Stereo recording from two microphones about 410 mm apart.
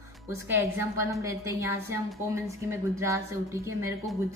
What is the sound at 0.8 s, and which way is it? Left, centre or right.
A woman's voice, centre.